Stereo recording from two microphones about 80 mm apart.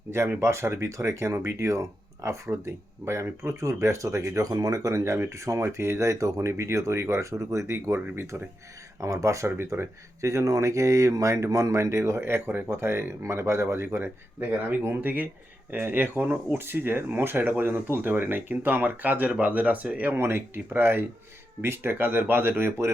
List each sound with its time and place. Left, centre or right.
0.3 s speech: right
9.0 s speech: right; by 20.1 s centre
20.1 s speech: right